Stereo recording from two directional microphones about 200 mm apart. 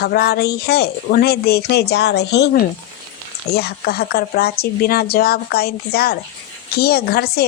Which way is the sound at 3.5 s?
50° left (ahead or behind).